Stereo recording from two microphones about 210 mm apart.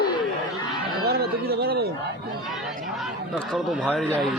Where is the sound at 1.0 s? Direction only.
50° right (ahead or behind).